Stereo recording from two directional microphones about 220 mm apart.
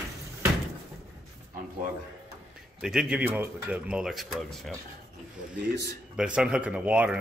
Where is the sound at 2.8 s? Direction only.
5° right (ahead or behind).